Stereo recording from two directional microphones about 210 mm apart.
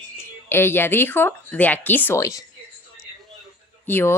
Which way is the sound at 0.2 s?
10° left (ahead or behind).